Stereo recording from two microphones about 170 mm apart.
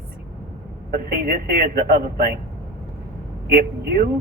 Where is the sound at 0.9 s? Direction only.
60° right (ahead or behind).